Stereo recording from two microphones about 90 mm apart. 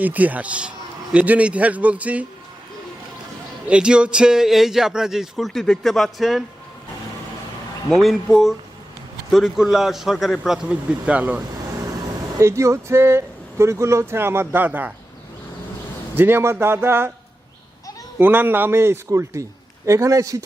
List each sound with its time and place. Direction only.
0.0 s speech: 20° right (ahead or behind)
3.7 s speech: 10° right (ahead or behind)
7.9 s speech: 5° left (ahead or behind); by 11.4 s 15° right (ahead or behind)
12.4 s speech: 30° right (ahead or behind)
16.1 s speech: 25° right (ahead or behind)
18.2 s speech: 20° right (ahead or behind); by 20.4 s 40° right (ahead or behind)